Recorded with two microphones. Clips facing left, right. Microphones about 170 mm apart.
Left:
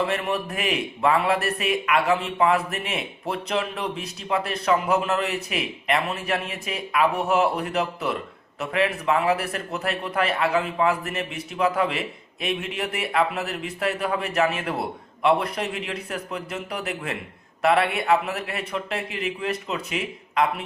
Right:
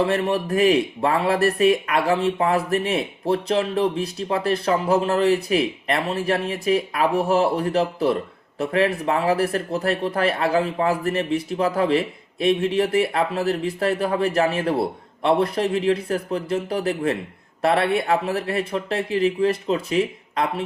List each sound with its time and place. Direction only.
0.0 s speech: 35° right (ahead or behind)